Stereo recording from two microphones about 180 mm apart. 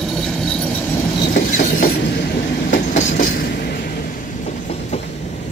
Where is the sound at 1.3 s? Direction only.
55° left (ahead or behind).